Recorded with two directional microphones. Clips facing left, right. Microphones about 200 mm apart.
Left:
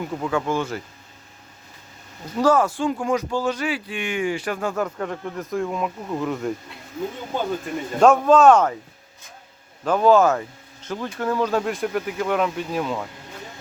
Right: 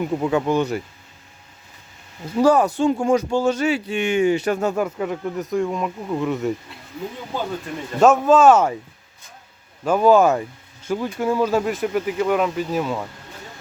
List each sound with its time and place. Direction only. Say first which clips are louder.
0.1 s speech: right 3 dB; 20° right (ahead or behind)
2.4 s speech: right 3 dB; 15° right (ahead or behind)
4.8 s speech: right 3 dB; 5° right (ahead or behind)
7.9 s speech: right 1 dB; centre (ahead or behind)
9.8 s speech: right 1 dB; 10° right (ahead or behind)